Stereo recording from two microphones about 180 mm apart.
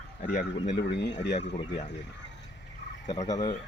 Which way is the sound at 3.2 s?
25° left (ahead or behind).